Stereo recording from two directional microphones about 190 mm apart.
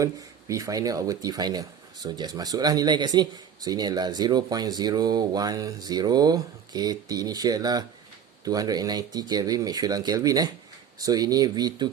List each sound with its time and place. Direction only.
0.0 s speech: 15° right (ahead or behind)